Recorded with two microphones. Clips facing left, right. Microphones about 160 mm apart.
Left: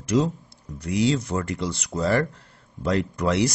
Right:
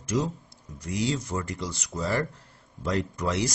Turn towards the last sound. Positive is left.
turn(degrees=70)  # may be behind; listen again after turning